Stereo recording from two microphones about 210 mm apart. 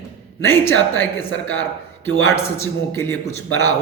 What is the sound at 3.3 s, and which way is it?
Speech, 85° left.